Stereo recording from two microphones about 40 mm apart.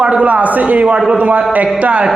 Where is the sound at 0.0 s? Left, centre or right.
Right.